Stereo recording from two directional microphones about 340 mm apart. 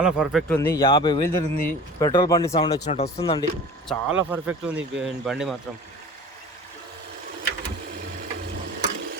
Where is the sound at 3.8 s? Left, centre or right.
Centre.